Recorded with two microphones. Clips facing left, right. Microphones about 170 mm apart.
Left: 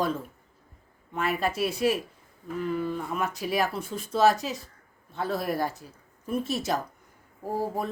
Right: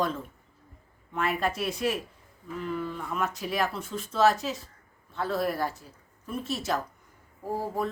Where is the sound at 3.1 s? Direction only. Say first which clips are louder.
Even; 10° left (ahead or behind).